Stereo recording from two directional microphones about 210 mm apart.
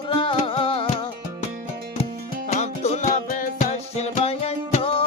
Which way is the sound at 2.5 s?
35° left (ahead or behind).